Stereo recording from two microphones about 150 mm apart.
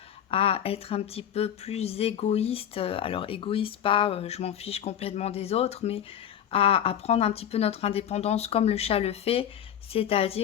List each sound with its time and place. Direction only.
0.3 s speech: 40° left (ahead or behind)